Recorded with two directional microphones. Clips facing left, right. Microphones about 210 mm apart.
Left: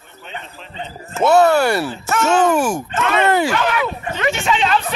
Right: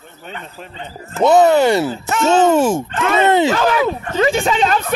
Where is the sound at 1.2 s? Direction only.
15° right (ahead or behind).